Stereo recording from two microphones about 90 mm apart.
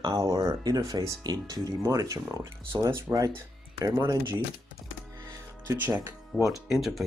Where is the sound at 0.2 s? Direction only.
45° right (ahead or behind).